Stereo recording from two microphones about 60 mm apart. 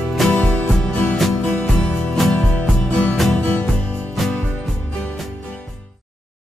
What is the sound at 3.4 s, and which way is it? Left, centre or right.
Music, left.